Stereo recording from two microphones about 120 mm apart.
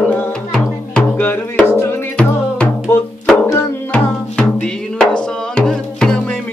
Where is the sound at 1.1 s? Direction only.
15° left (ahead or behind).